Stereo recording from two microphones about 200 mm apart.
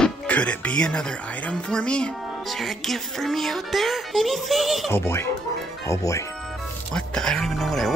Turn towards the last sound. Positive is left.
turn(degrees=0)  # may be behind; listen again after turning